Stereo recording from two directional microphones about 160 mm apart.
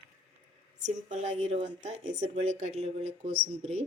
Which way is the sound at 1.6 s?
45° right (ahead or behind).